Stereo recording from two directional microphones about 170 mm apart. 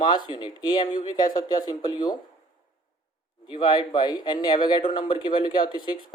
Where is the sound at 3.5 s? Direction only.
25° left (ahead or behind).